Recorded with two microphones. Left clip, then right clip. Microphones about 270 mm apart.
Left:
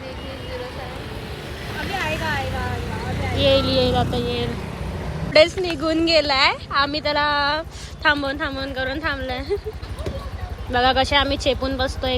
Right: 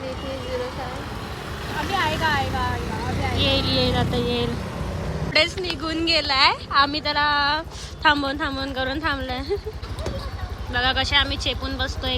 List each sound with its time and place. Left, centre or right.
3.3 s a woman's voice: centre
10.7 s speech: centre